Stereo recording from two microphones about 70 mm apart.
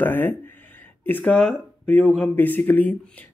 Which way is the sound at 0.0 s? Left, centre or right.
Left.